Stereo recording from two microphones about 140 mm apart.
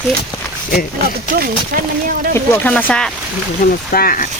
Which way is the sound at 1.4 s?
90° right.